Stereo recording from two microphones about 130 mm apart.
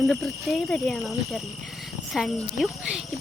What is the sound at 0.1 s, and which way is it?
Speech, 5° left (ahead or behind).